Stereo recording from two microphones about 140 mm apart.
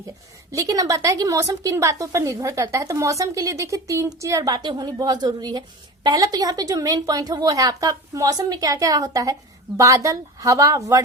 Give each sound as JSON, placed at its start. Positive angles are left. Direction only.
{"t": 0.5, "sound": "a woman's voice", "side_deg": -25}